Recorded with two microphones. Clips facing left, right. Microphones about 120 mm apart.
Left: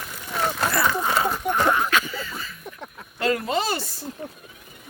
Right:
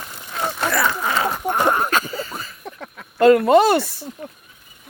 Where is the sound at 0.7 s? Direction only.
90° right.